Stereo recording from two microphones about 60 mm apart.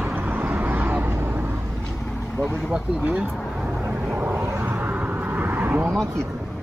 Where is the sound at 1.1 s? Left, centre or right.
Right.